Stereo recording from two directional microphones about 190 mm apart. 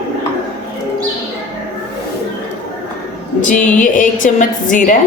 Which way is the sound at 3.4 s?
40° left (ahead or behind).